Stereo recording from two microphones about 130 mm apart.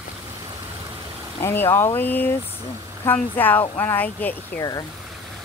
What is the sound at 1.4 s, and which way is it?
Speech, 20° left (ahead or behind).